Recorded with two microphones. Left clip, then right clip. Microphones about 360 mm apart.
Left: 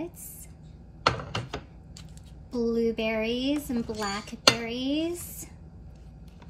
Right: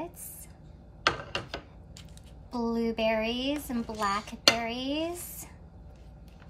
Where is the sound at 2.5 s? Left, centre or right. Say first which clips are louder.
Left 4 dB; centre.